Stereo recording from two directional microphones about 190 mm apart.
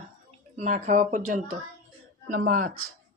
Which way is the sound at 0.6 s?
40° right (ahead or behind).